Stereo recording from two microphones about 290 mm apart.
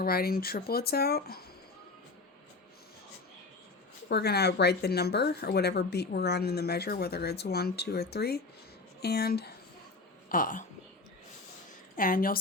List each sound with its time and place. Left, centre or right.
0.0 s speech: left
4.1 s speech: left
11.9 s speech: left